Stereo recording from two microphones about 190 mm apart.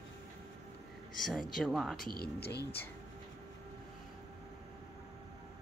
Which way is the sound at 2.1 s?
55° left (ahead or behind).